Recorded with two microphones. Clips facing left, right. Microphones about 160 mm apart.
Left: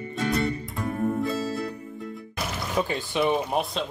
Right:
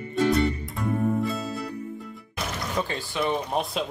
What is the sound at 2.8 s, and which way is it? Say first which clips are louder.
Speech: left 4 dB; 15° left (ahead or behind).